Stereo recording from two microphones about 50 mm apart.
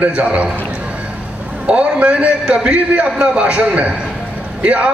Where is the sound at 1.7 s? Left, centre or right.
Right.